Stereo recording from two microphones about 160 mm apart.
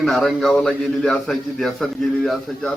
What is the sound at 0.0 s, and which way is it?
A man's voice, centre (ahead or behind).